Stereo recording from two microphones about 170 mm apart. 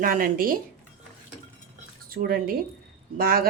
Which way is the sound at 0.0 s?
55° right (ahead or behind).